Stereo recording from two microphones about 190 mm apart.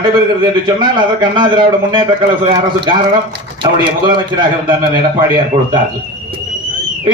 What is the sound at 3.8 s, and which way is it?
A man's voice, 25° right (ahead or behind).